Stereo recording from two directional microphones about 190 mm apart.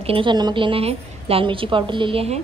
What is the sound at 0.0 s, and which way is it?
A woman's voice, 30° right (ahead or behind).